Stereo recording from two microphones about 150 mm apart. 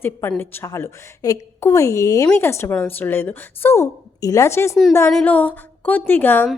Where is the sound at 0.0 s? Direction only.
15° left (ahead or behind).